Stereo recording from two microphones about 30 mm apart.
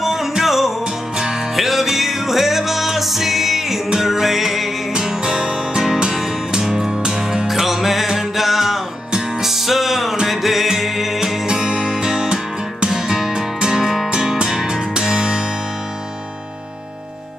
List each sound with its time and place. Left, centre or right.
0.0 s music: centre
0.8 s music: right
1.5 s music: centre
5.2 s music: right
6.1 s music: centre
6.9 s music: right
7.4 s music: centre
11.4 s music: right
14.1 s music: right